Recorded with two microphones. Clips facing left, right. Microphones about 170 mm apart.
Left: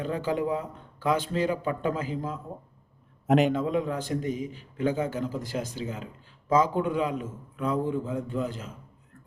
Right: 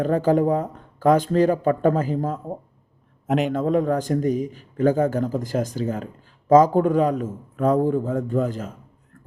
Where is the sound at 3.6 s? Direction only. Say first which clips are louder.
Right 7 dB; 45° right (ahead or behind).